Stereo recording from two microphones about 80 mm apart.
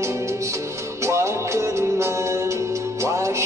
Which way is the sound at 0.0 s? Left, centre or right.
Right.